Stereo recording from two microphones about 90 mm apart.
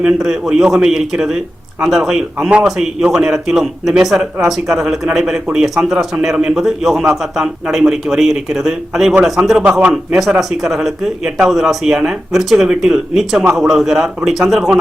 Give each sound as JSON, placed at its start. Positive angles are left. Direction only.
{"t": 0.0, "sound": "a man's voice", "side_deg": -5}